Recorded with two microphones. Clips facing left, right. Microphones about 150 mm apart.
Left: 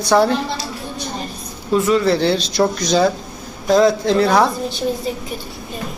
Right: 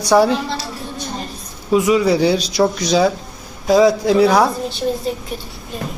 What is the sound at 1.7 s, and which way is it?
Speech, 10° right (ahead or behind).